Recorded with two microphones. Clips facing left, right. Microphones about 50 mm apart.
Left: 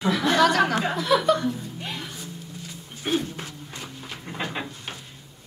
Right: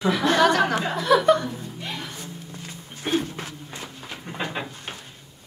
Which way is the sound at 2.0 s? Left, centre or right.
Right.